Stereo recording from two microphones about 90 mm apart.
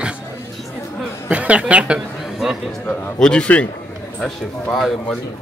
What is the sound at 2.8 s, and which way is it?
A man's voice, 15° left (ahead or behind).